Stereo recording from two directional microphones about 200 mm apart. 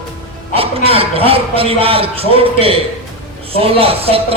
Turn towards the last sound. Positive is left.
turn(degrees=-30)  # may be behind; listen again after turning